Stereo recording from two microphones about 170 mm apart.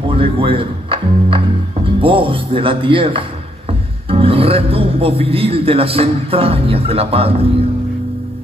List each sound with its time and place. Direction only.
0.1 s speech: 30° right (ahead or behind)